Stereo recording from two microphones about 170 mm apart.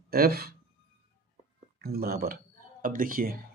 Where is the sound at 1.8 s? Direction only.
65° right (ahead or behind).